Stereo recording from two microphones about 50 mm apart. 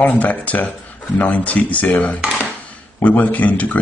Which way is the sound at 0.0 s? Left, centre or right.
Left.